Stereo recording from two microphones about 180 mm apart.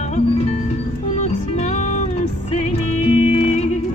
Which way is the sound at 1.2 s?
40° left (ahead or behind).